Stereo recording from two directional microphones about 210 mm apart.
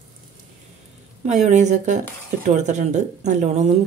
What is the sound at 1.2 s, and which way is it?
A woman's voice, 35° right (ahead or behind).